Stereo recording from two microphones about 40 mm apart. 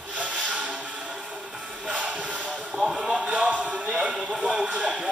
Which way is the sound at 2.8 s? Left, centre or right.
Centre.